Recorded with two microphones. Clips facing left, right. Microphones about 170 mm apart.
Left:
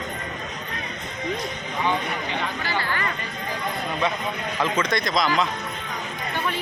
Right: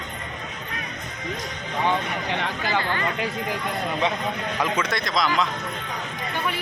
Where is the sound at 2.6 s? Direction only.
20° right (ahead or behind).